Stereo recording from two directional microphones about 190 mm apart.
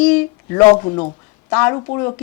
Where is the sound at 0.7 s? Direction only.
25° left (ahead or behind).